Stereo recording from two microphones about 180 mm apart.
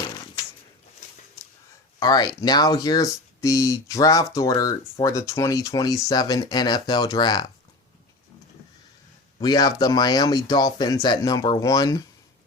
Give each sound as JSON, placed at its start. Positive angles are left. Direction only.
{"t": 2.0, "sound": "speech", "side_deg": 20}
{"t": 9.4, "sound": "speech", "side_deg": 20}